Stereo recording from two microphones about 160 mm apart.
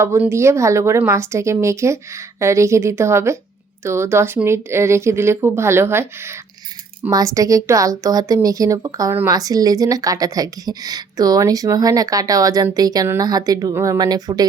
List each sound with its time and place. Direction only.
0.0 s a woman's voice: 15° right (ahead or behind)